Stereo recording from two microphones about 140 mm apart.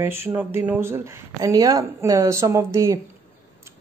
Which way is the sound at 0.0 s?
15° right (ahead or behind).